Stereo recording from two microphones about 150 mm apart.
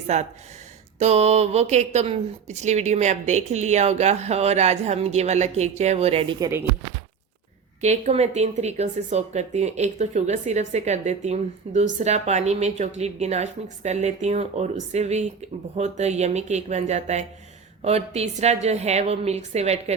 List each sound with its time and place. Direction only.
0.1 s speech: 50° right (ahead or behind)
7.8 s speech: 50° right (ahead or behind)